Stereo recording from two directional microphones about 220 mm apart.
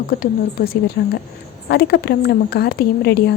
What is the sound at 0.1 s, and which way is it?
A woman's voice, 40° left (ahead or behind).